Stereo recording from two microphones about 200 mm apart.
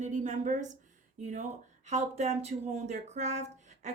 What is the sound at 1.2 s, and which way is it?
Speech, 40° right (ahead or behind).